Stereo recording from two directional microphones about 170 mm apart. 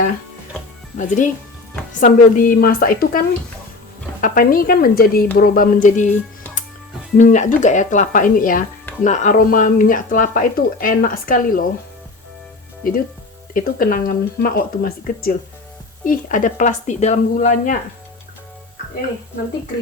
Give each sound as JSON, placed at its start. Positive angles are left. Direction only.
{"t": 0.9, "sound": "speech", "side_deg": 50}
{"t": 7.2, "sound": "speech", "side_deg": 45}
{"t": 12.8, "sound": "speech", "side_deg": 55}